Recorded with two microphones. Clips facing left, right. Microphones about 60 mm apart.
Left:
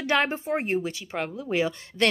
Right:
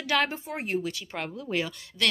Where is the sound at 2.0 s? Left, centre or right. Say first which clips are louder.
Left 5 dB; left.